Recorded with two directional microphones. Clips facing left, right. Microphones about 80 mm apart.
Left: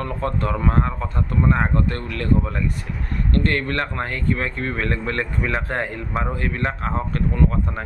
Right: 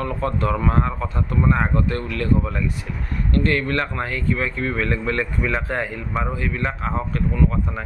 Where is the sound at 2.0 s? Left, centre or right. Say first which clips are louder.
Right 2 dB; left.